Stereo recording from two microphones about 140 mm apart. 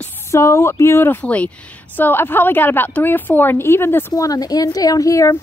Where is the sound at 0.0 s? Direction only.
20° left (ahead or behind).